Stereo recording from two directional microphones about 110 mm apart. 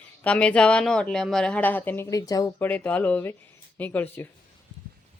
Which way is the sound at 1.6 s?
15° left (ahead or behind).